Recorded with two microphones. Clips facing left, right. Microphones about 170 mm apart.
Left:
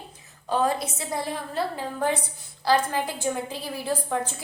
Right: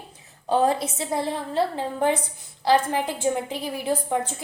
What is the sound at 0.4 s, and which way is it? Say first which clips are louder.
A woman's voice: right 3 dB; 30° right (ahead or behind).